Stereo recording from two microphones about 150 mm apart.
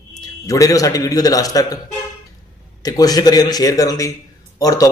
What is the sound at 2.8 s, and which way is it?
A man's voice, 25° left (ahead or behind).